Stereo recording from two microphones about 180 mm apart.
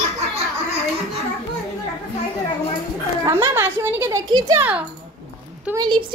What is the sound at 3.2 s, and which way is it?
A child's voice, 15° right (ahead or behind).